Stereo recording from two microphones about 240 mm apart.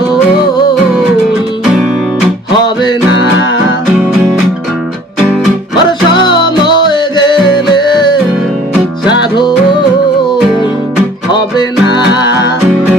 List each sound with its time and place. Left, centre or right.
6.2 s music: centre
11.3 s music: centre
12.2 s music: left